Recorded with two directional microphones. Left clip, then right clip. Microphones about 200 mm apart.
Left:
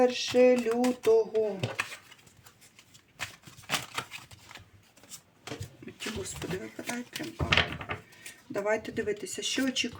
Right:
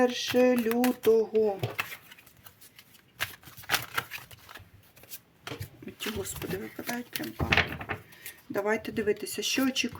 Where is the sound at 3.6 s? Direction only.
25° right (ahead or behind).